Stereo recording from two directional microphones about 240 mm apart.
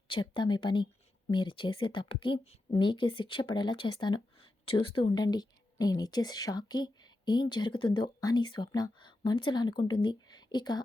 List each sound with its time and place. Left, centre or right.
0.1 s speech: centre